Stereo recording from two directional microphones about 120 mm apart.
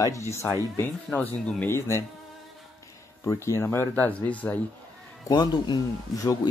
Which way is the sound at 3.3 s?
25° left (ahead or behind).